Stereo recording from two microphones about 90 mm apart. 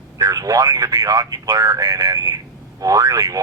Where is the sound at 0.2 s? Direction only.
40° right (ahead or behind).